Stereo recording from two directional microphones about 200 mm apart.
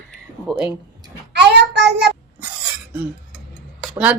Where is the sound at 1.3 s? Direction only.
55° right (ahead or behind).